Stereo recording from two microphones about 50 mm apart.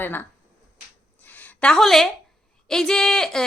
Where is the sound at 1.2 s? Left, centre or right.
Left.